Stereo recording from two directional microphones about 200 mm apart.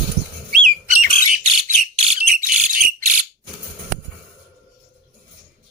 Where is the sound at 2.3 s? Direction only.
40° right (ahead or behind).